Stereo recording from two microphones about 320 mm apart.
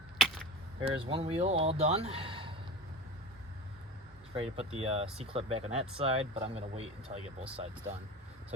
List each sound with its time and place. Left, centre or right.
0.8 s speech: centre
4.4 s speech: centre